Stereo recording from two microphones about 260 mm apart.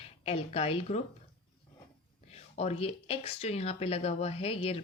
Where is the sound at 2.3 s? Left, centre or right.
Left.